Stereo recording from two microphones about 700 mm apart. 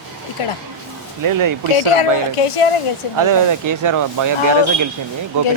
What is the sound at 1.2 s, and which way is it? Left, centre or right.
Speech, right.